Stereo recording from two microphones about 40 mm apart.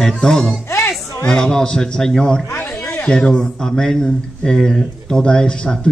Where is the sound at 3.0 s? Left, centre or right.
Left.